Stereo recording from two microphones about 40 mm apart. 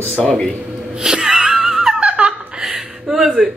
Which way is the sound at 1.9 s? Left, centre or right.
Right.